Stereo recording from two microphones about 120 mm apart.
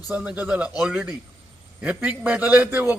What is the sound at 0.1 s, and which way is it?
A man's voice, 10° right (ahead or behind).